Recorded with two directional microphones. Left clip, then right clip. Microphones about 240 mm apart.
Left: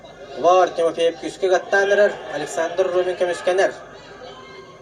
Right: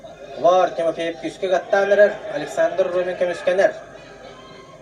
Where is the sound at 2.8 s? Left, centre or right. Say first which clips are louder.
Left 1 dB; left.